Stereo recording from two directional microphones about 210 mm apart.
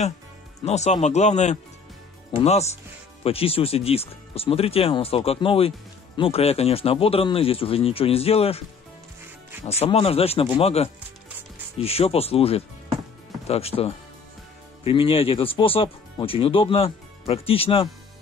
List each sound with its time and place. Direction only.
0.7 s speech: 30° left (ahead or behind)
9.7 s speech: 30° left (ahead or behind)